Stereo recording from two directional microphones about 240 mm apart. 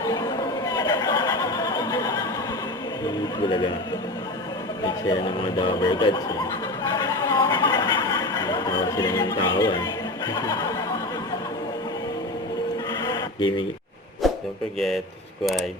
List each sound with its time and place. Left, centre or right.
0.0 s neigh: centre
3.4 s speech: left
5.5 s speech: centre
6.9 s a sound: centre
13.1 s a sound: centre
14.8 s speech: centre